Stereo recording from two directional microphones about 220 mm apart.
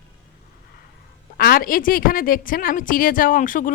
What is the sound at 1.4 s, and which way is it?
A woman's voice, 40° left (ahead or behind).